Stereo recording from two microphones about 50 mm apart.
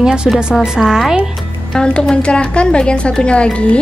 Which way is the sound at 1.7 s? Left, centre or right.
Centre.